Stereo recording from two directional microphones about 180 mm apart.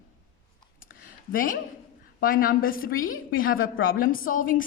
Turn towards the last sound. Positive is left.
turn(degrees=50)  # may be behind; listen again after turning